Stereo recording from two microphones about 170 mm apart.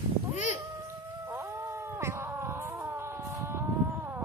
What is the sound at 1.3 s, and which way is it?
Cat, 15° right (ahead or behind).